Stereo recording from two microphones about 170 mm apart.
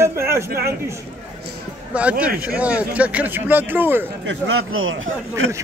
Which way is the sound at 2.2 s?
10° right (ahead or behind).